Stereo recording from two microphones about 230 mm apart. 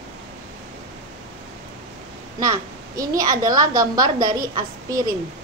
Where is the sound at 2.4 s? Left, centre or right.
Centre.